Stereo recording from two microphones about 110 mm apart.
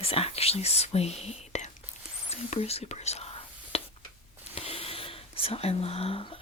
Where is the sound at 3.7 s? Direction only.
70° left (ahead or behind).